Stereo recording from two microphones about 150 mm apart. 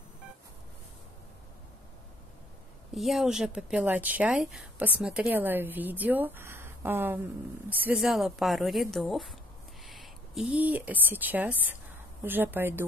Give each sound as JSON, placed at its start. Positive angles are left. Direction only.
{"t": 2.9, "sound": "speech", "side_deg": 0}